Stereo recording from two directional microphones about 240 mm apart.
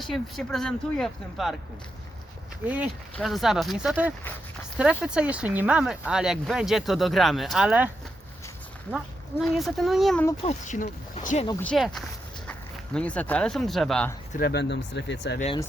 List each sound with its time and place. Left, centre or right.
0.0 s speech: centre
2.6 s speech: centre
9.4 s speech: centre
10.4 s speech: left
11.6 s speech: centre
14.3 s speech: left
15.4 s speech: left